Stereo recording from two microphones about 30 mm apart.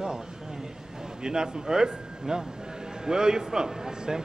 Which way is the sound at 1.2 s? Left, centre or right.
Right.